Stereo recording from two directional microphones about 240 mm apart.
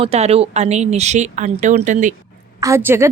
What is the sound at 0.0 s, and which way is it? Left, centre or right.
Speech, right.